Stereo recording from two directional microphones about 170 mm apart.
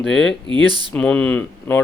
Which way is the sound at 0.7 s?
25° right (ahead or behind).